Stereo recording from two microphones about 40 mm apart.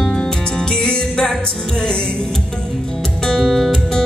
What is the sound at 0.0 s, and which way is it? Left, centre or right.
Music, left.